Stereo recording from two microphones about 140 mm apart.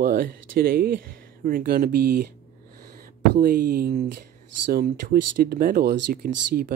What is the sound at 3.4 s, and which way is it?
Speech, 90° right.